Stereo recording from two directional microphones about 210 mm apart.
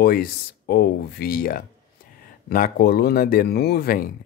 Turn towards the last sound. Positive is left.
turn(degrees=45)  # may be behind; listen again after turning